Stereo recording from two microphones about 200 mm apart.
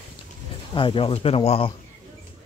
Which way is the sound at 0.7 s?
25° left (ahead or behind).